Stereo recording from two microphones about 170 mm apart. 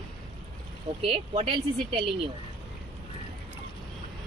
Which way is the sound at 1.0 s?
35° right (ahead or behind).